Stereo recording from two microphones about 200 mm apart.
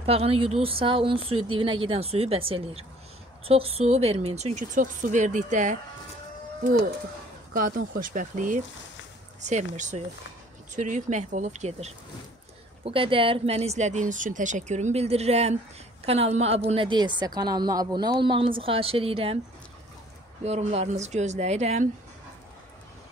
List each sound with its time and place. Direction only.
0.0 s speech: 30° right (ahead or behind)
7.5 s speech: 45° right (ahead or behind); by 19.3 s 30° right (ahead or behind)
20.4 s speech: 35° right (ahead or behind)